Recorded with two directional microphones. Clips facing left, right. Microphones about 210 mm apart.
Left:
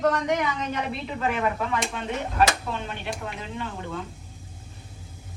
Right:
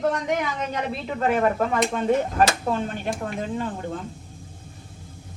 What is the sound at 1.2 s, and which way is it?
Speech, 45° right (ahead or behind).